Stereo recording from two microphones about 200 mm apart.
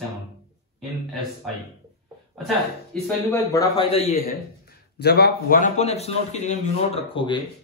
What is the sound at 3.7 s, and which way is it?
Speech, 30° left (ahead or behind).